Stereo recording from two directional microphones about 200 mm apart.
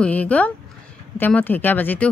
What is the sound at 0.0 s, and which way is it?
Speech, 5° left (ahead or behind).